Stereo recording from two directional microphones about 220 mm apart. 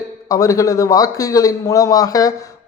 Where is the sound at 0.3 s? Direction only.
15° left (ahead or behind).